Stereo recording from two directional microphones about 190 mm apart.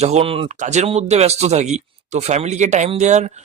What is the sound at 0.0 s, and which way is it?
Speech, 30° right (ahead or behind).